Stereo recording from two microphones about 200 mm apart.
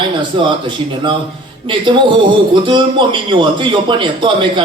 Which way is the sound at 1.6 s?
25° right (ahead or behind).